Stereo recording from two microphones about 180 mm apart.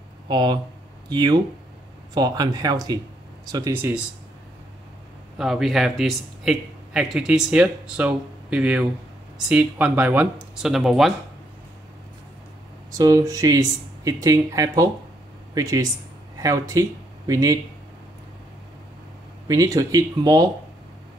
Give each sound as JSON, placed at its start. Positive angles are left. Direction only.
{"t": 0.3, "sound": "speech", "side_deg": -25}
{"t": 3.7, "sound": "speech", "side_deg": -10}
{"t": 5.4, "sound": "a man's voice", "side_deg": 0}
{"t": 12.9, "sound": "speech", "side_deg": -20}
{"t": 19.4, "sound": "speech", "side_deg": -20}